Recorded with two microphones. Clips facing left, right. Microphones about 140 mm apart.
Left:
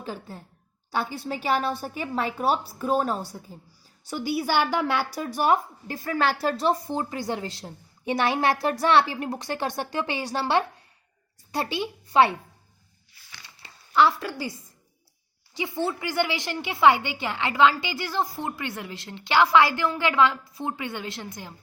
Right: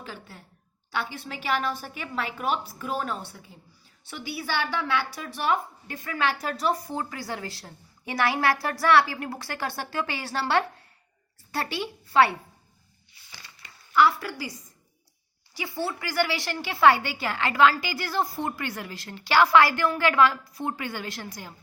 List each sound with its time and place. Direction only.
0.0 s a woman's voice: 35° left (ahead or behind); by 12.4 s 20° left (ahead or behind)
13.6 s a sound: 30° left (ahead or behind)
15.5 s a woman's voice: 20° left (ahead or behind)